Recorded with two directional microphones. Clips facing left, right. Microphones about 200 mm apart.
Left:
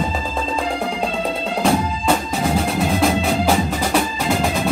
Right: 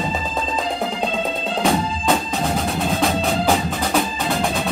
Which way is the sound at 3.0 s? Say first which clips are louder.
Left 2 dB; centre (ahead or behind).